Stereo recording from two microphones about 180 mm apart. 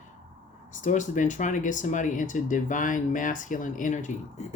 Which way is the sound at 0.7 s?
45° left (ahead or behind).